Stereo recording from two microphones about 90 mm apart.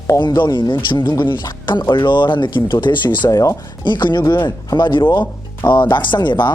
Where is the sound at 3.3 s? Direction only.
40° left (ahead or behind).